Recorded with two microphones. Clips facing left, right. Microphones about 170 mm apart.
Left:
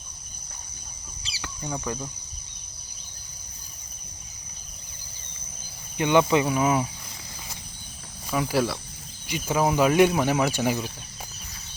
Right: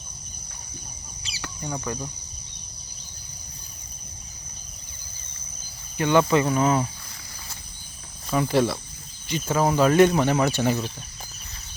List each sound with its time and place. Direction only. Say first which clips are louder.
1.7 s speech: even; centre (ahead or behind)
6.0 s speech: right 1 dB; 15° left (ahead or behind)
8.3 s speech: right 3 dB; 5° left (ahead or behind)